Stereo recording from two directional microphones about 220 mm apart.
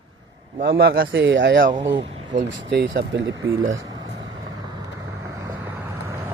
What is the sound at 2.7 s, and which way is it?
Speech, 55° right (ahead or behind).